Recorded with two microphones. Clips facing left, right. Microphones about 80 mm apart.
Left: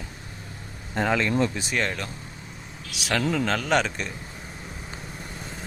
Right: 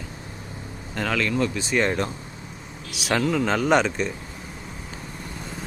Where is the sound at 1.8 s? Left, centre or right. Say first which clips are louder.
Right 6 dB; right.